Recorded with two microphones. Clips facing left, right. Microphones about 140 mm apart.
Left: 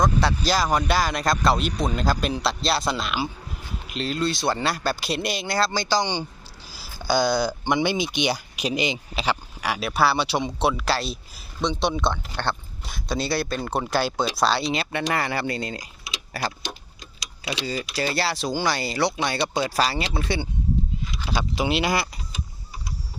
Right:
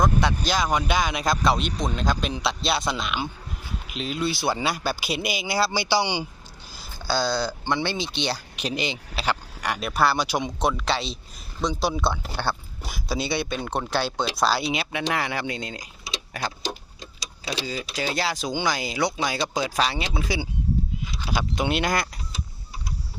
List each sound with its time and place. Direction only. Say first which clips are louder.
0.0 s speech: left 1 dB; centre (ahead or behind)
6.7 s speech: left 3 dB; 10° left (ahead or behind)
16.6 s clock: right 4 dB; 30° right (ahead or behind)
17.5 s speech: left 2 dB; centre (ahead or behind)
21.5 s speech: left 1 dB; 5° left (ahead or behind)